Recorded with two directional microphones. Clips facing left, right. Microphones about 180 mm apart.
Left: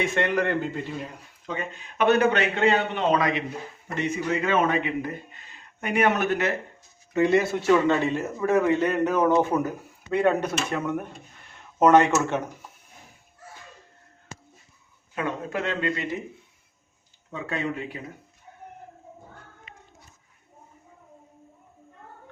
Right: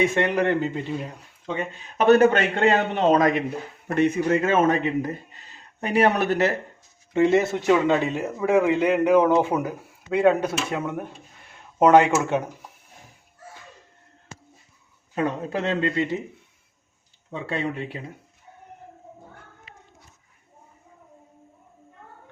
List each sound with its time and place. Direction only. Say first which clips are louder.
0.0 s a man's voice: right 3 dB; 15° right (ahead or behind)
2.0 s a man's voice: right 5 dB; 45° right (ahead or behind)
3.8 s a man's voice: right 7 dB; 55° right (ahead or behind); by 10.8 s 10° right (ahead or behind)
11.8 s a man's voice: right 2 dB; 10° right (ahead or behind)
15.1 s a man's voice: right 4 dB; 35° right (ahead or behind)
17.3 s speech: right 2 dB; 30° right (ahead or behind)